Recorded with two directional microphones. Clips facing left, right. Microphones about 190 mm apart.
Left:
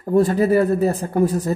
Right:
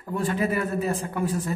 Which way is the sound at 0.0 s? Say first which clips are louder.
Left 9 dB; 40° left (ahead or behind).